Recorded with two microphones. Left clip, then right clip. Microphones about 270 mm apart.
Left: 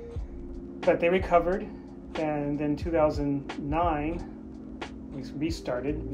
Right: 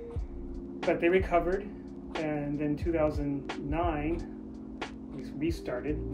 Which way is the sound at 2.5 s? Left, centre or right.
Left.